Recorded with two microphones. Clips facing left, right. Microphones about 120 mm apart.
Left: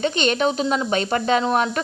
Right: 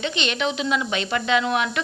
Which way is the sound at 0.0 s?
45° left (ahead or behind).